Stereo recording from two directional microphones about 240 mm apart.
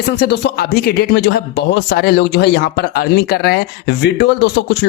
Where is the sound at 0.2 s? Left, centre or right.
Left.